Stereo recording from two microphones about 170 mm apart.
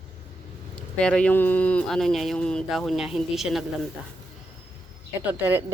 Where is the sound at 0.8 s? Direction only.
5° left (ahead or behind).